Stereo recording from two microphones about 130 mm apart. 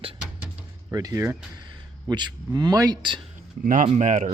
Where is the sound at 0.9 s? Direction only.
25° right (ahead or behind).